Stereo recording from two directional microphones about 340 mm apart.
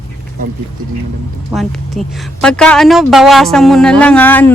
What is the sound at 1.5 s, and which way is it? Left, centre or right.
Speech, centre.